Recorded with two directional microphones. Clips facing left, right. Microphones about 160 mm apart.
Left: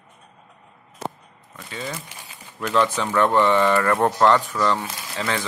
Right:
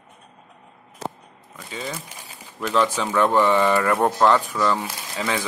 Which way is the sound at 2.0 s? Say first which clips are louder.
Even; 40° right (ahead or behind).